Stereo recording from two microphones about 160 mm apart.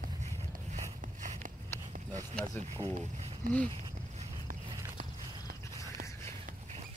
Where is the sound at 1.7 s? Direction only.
15° left (ahead or behind).